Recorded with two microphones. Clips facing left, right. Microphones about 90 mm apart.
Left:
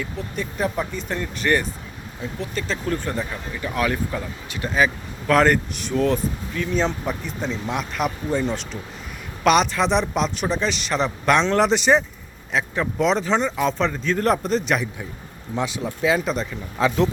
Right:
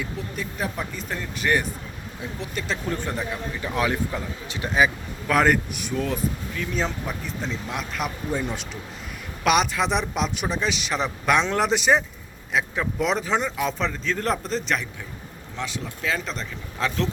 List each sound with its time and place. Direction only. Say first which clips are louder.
0.0 s speech: left 2 dB; centre (ahead or behind)
8.3 s speech: left 4 dB; 10° right (ahead or behind); by 14.8 s 5° left (ahead or behind)
15.5 s speech: left 6 dB; 20° left (ahead or behind)